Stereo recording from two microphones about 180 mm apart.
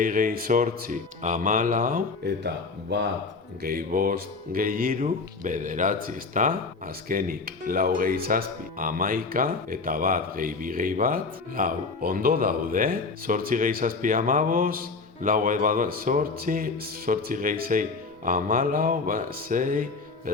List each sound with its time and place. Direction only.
0.0 s speech: 50° right (ahead or behind)
3.6 s speech: 55° right (ahead or behind)